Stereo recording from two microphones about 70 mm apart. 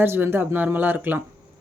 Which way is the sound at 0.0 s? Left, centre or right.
Right.